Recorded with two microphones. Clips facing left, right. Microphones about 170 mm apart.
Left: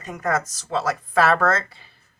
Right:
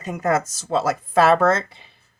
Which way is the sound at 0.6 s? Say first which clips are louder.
Right 3 dB; 25° right (ahead or behind).